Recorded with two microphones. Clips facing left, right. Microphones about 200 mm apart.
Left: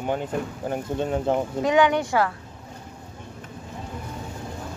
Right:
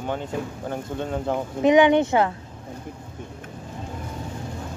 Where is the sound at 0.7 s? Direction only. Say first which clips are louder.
Left 3 dB; 20° left (ahead or behind).